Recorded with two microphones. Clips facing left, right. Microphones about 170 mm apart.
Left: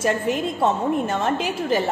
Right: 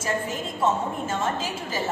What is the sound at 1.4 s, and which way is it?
Speech, 65° left (ahead or behind).